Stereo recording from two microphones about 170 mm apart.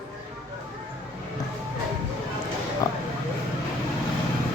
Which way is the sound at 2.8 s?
20° left (ahead or behind).